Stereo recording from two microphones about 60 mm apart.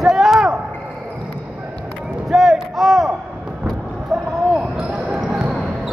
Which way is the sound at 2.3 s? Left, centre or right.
Centre.